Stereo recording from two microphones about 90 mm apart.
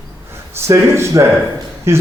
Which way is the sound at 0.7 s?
35° right (ahead or behind).